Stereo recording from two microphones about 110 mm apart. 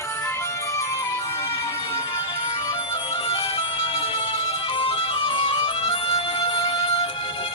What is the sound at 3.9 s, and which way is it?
Music, 60° left (ahead or behind).